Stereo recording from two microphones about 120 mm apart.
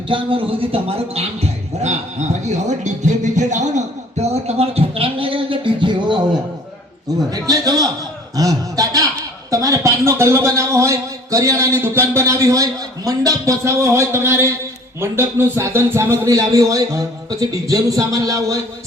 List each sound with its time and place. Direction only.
0.1 s music: 45° right (ahead or behind)
7.3 s a man's voice: 30° right (ahead or behind)